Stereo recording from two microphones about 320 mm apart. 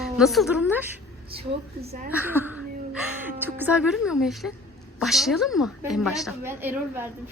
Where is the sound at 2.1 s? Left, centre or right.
Centre.